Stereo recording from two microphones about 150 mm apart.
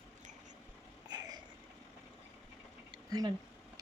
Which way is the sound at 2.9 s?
25° right (ahead or behind).